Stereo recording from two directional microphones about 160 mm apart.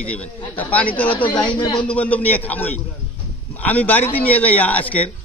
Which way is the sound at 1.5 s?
30° left (ahead or behind).